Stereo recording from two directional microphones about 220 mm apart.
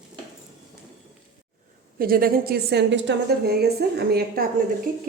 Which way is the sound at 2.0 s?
40° right (ahead or behind).